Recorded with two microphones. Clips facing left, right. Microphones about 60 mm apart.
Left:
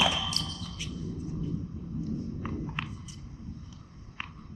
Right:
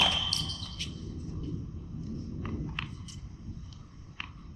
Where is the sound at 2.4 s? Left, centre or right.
Centre.